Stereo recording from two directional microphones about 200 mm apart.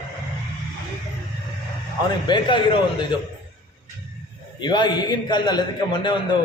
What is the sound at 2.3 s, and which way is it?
Speech, 25° left (ahead or behind).